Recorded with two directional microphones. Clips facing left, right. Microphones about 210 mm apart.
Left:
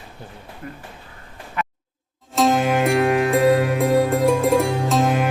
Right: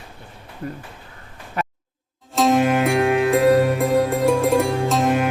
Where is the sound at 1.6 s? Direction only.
40° right (ahead or behind).